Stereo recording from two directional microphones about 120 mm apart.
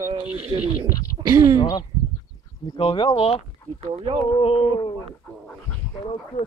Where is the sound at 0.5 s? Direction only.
40° right (ahead or behind).